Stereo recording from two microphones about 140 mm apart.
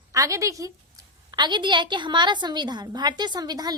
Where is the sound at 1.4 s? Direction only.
35° right (ahead or behind).